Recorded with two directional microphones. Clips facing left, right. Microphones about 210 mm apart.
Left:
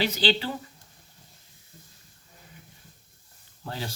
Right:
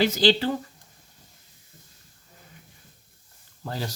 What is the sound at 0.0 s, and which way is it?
Speech, 40° right (ahead or behind).